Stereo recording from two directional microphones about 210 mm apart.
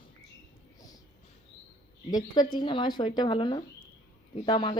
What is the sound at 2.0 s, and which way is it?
Speech, 20° left (ahead or behind).